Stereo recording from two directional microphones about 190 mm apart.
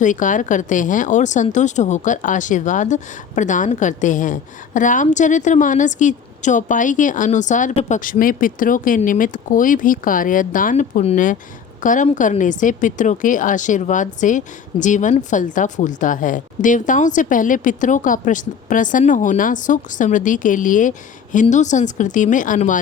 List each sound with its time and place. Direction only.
0.0 s a woman's voice: 40° left (ahead or behind)